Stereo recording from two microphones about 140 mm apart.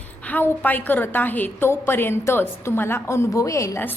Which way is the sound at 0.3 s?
15° left (ahead or behind).